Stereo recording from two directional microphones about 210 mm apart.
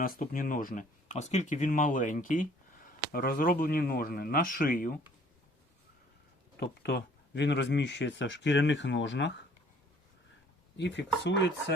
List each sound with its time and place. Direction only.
0.0 s speech: 40° left (ahead or behind)
6.6 s speech: 55° left (ahead or behind)
10.8 s speech: 55° left (ahead or behind)